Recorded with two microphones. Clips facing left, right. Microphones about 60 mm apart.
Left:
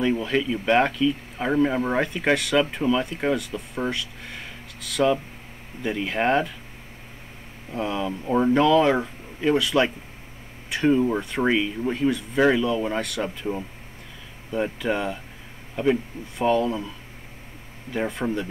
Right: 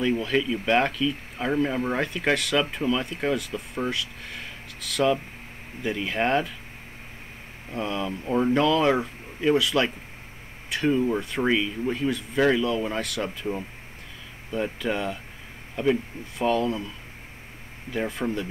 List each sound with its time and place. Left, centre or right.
0.2 s speech: centre
7.7 s speech: centre
17.9 s speech: centre